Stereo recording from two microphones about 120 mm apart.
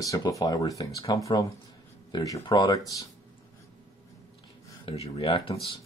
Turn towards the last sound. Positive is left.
turn(degrees=50)  # may be behind; listen again after turning